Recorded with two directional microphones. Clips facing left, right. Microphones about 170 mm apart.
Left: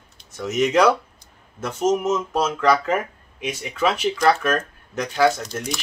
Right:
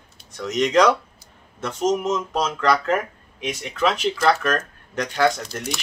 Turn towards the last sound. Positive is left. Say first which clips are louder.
# left 1 dB
turn(degrees=0)  # may be behind; listen again after turning